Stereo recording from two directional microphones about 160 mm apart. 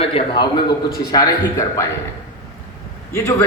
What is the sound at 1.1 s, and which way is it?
Speech, 20° left (ahead or behind).